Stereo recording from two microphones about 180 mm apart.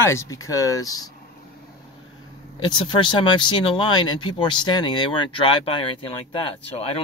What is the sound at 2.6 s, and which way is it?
Speech, 25° left (ahead or behind).